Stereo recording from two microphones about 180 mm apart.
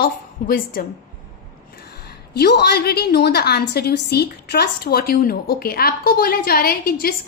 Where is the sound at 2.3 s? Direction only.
65° left (ahead or behind).